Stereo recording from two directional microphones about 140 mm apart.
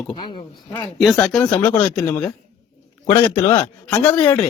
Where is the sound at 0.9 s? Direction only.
5° left (ahead or behind).